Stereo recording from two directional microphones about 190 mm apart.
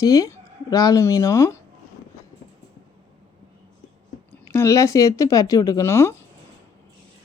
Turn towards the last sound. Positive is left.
turn(degrees=15)  # may be behind; listen again after turning